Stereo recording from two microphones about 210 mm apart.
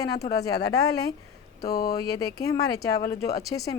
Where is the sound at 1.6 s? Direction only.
50° left (ahead or behind).